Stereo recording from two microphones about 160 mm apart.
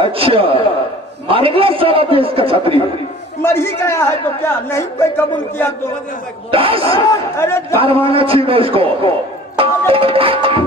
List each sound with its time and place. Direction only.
0.0 s a man's voice: 35° right (ahead or behind)
3.4 s a man's voice: 15° left (ahead or behind)
6.5 s a man's voice: 35° right (ahead or behind)
7.1 s a man's voice: 15° left (ahead or behind)
7.8 s a man's voice: 35° right (ahead or behind)